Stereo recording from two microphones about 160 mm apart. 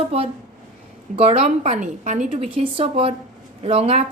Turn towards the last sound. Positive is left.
turn(degrees=-40)  # may be behind; listen again after turning